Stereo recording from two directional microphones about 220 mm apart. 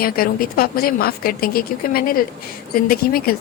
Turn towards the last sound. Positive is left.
turn(degrees=40)  # may be behind; listen again after turning